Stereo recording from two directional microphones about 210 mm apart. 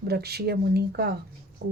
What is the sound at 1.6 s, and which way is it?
Music, 50° right (ahead or behind).